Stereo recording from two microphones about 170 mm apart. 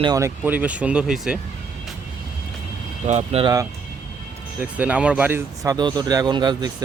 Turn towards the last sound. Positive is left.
turn(degrees=-25)  # may be behind; listen again after turning